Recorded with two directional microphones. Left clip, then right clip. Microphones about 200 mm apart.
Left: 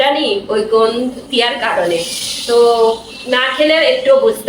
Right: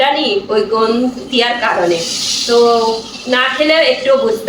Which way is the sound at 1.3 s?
5° left (ahead or behind).